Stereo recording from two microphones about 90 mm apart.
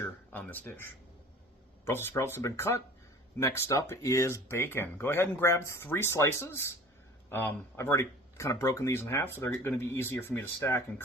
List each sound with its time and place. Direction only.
0.0 s a sound: 25° left (ahead or behind)
1.8 s a man's voice: 25° left (ahead or behind)
7.8 s speech: 35° left (ahead or behind)